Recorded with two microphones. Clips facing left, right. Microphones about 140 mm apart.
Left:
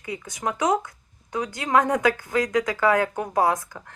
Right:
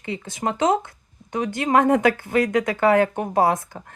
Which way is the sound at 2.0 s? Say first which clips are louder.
Right 3 dB; 60° right (ahead or behind).